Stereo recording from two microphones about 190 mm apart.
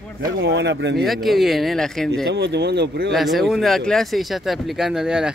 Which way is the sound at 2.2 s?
60° right (ahead or behind).